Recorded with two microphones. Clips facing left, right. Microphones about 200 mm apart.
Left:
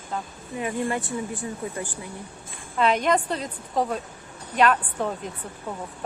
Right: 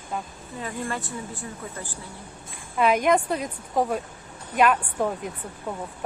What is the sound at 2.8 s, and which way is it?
A woman's voice, 5° right (ahead or behind).